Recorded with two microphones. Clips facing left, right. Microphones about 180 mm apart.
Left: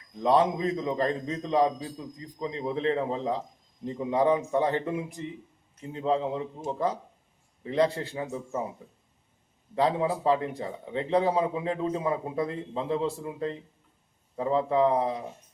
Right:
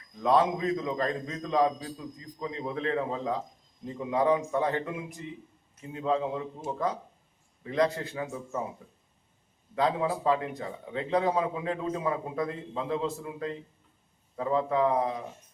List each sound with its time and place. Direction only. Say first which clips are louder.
0.2 s a man's voice: left 1 dB; 25° left (ahead or behind)
9.7 s a man's voice: left 2 dB; 30° left (ahead or behind)